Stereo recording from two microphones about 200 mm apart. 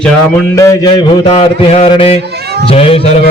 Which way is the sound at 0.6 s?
20° left (ahead or behind).